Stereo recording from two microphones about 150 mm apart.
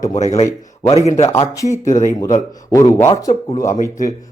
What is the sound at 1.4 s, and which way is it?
Speech, 25° left (ahead or behind).